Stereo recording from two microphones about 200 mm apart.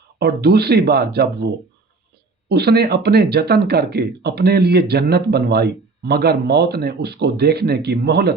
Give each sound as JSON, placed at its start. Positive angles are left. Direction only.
{"t": 0.2, "sound": "speech", "side_deg": -55}
{"t": 2.5, "sound": "speech", "side_deg": -55}